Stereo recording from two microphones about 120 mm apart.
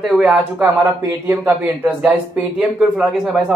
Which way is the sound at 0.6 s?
20° right (ahead or behind).